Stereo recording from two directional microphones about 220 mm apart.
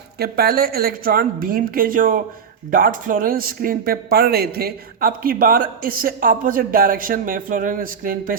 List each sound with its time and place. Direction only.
0.2 s a man's voice: 45° right (ahead or behind)